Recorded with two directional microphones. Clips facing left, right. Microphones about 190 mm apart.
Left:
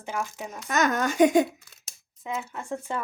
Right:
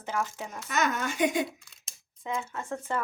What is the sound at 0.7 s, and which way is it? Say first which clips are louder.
Speech: left 5 dB; 40° left (ahead or behind).